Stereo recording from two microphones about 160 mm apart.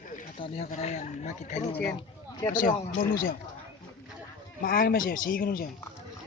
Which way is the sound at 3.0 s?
60° left (ahead or behind).